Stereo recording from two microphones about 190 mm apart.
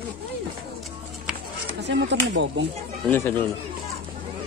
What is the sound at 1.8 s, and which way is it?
Speech, 65° right (ahead or behind).